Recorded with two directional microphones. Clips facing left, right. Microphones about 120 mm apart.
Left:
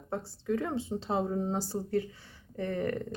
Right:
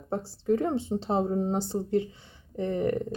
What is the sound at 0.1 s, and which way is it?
Speech, 30° right (ahead or behind).